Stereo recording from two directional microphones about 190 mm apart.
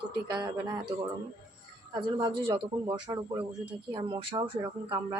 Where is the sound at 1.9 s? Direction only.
25° right (ahead or behind).